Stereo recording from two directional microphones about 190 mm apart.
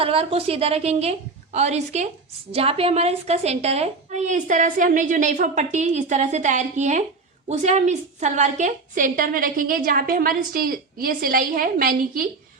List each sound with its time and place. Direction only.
0.0 s a woman's voice: 30° right (ahead or behind); by 12.3 s 50° right (ahead or behind)